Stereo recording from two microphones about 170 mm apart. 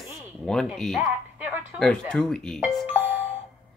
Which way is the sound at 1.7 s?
5° left (ahead or behind).